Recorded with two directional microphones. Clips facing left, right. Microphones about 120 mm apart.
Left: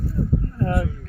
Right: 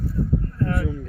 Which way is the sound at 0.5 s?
25° left (ahead or behind).